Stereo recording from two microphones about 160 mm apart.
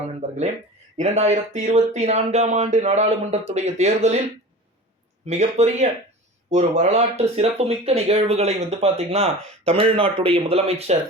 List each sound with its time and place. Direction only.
0.9 s speech: 45° right (ahead or behind)
5.2 s speech: 45° right (ahead or behind)